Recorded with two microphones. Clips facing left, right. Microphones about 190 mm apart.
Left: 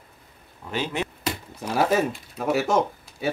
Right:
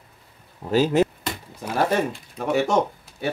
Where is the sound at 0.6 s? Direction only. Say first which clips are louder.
Right 9 dB; 40° right (ahead or behind).